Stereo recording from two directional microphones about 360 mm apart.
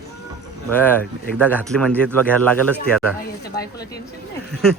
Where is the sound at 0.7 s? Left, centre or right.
Centre.